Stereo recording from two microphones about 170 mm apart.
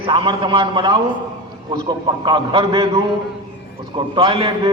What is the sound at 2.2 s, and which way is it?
Speech, 30° right (ahead or behind).